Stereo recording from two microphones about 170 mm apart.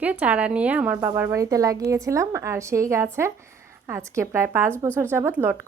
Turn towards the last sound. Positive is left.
turn(degrees=-15)  # may be behind; listen again after turning